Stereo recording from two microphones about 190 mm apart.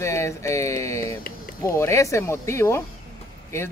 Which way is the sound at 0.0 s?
15° left (ahead or behind).